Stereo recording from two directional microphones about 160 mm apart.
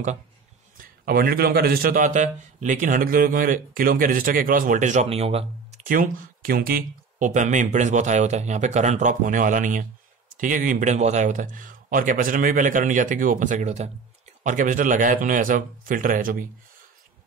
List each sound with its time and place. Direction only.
1.0 s a man's voice: 70° right (ahead or behind); by 5.8 s 40° right (ahead or behind)
5.9 s a man's voice: 60° right (ahead or behind)